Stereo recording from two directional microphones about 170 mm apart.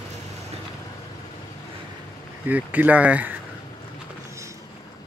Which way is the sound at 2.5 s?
10° right (ahead or behind).